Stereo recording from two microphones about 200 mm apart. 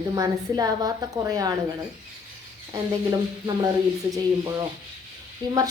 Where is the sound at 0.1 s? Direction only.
20° right (ahead or behind).